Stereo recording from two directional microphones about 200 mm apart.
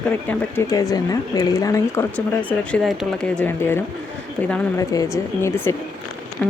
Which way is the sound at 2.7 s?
Centre (ahead or behind).